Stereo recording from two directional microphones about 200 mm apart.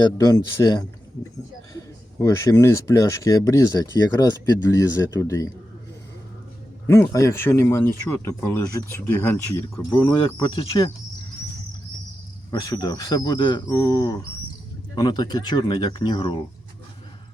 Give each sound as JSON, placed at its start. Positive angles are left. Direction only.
{"t": 0.2, "sound": "speech", "side_deg": 20}
{"t": 6.8, "sound": "speech", "side_deg": 10}
{"t": 10.2, "sound": "speech", "side_deg": 25}
{"t": 12.5, "sound": "speech", "side_deg": 20}